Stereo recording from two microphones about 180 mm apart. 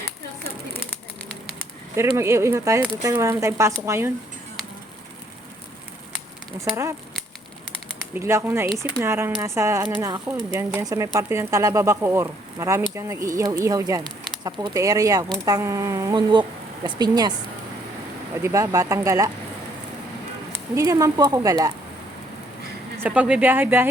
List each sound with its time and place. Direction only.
2.0 s speech: 15° right (ahead or behind)
6.6 s speech: 15° right (ahead or behind)
8.1 s speech: 15° right (ahead or behind)
18.4 s speech: 20° right (ahead or behind)
20.7 s speech: 20° right (ahead or behind)
23.0 s speech: 10° right (ahead or behind)